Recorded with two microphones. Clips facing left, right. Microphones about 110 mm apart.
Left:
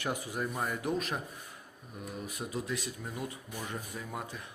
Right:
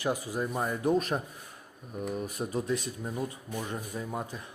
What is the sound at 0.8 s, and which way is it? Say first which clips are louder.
Speech: right 9 dB; 40° right (ahead or behind).